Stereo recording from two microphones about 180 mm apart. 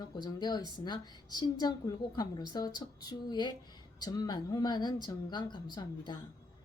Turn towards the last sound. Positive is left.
turn(degrees=25)  # may be behind; listen again after turning